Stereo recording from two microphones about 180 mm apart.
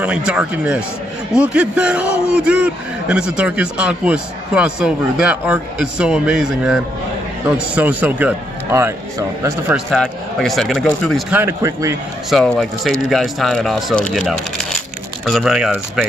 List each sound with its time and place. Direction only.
0.0 s a man's voice: 5° right (ahead or behind)
9.8 s speech: centre (ahead or behind)
11.3 s a man's voice: 15° right (ahead or behind)
12.3 s speech: centre (ahead or behind)